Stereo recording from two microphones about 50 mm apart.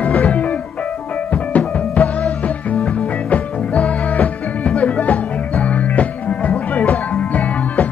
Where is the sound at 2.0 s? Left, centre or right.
Left.